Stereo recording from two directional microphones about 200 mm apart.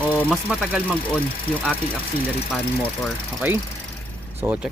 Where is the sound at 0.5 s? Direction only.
5° right (ahead or behind).